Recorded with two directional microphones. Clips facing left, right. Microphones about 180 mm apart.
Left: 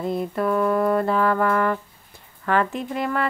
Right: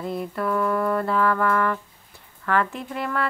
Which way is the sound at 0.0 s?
25° left (ahead or behind).